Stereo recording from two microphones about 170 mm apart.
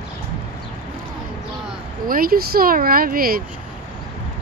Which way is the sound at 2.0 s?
60° right (ahead or behind).